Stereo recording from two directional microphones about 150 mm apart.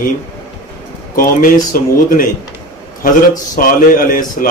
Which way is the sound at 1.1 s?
65° left (ahead or behind).